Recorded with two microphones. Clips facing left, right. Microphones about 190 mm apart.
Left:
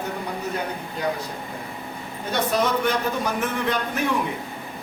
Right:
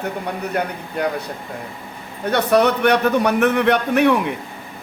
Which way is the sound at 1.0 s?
60° right (ahead or behind).